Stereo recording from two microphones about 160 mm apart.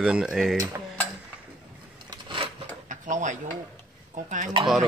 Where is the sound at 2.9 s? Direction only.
50° right (ahead or behind).